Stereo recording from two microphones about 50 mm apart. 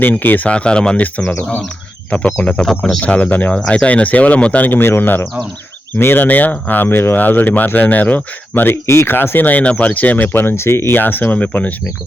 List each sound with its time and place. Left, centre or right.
0.0 s speech: left
0.4 s speech: left
2.0 s speech: left
4.8 s speech: left
6.2 s speech: left
8.7 s speech: left
9.1 s speech: left